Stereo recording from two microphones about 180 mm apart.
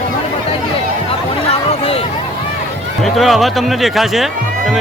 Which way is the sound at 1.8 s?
30° left (ahead or behind).